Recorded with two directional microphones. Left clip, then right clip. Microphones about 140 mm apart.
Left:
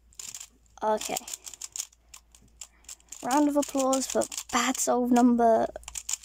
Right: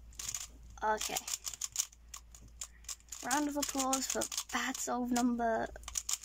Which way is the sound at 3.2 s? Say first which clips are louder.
Left 10 dB; 30° left (ahead or behind).